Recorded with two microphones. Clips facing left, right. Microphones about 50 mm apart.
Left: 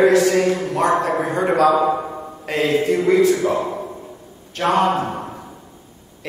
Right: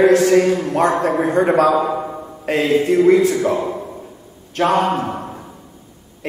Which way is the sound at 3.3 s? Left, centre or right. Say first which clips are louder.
Even; centre.